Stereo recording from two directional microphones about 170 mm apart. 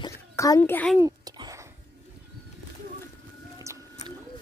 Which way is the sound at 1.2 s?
25° right (ahead or behind).